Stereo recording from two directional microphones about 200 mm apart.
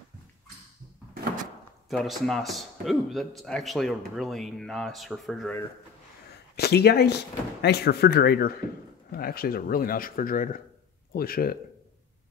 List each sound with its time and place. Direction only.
1.9 s a man's voice: centre (ahead or behind)
6.5 s speech: 55° left (ahead or behind)